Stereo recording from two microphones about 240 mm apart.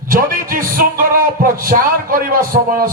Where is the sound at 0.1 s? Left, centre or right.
Right.